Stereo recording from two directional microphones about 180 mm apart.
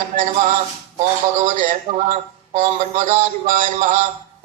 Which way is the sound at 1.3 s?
45° right (ahead or behind).